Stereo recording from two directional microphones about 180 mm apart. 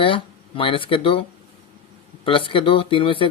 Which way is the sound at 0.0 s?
30° left (ahead or behind).